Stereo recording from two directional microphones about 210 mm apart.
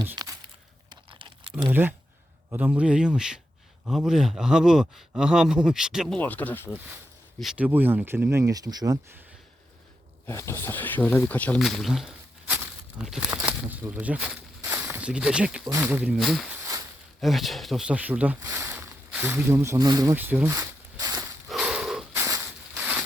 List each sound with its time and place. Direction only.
0.0 s a sound: 15° right (ahead or behind)
0.9 s typing: 20° right (ahead or behind)
1.7 s speech: 10° right (ahead or behind)
6.1 s speech: 10° left (ahead or behind)
7.3 s speech: 5° right (ahead or behind)
10.2 s speech: 15° left (ahead or behind); by 14.3 s 5° right (ahead or behind)
14.6 s walk: 10° right (ahead or behind)
14.9 s speech: 5° right (ahead or behind)
21.5 s a sound: 5° right (ahead or behind)